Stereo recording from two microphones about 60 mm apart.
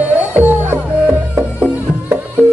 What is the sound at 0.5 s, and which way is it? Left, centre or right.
Music, right.